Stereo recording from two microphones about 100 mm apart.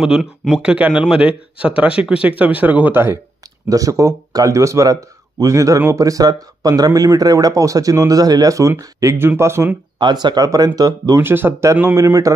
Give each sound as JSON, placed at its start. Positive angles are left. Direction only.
{"t": 0.0, "sound": "speech", "side_deg": -5}
{"t": 3.6, "sound": "speech", "side_deg": -35}
{"t": 9.9, "sound": "speech", "side_deg": -50}